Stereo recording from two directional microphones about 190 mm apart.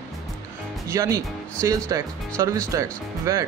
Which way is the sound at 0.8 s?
15° right (ahead or behind).